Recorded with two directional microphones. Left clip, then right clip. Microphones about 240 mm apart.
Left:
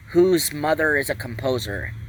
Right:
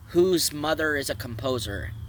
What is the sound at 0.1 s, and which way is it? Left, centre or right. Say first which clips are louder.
Speech: left 4 dB; centre.